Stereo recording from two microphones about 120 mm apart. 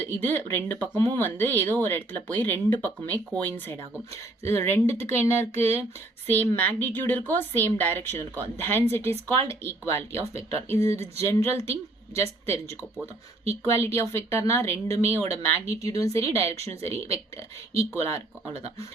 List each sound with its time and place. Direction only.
0.0 s a woman's voice: 15° left (ahead or behind)